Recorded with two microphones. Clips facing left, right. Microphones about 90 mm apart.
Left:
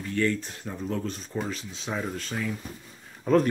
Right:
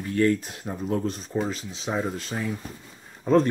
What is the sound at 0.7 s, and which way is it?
Speech, 25° right (ahead or behind).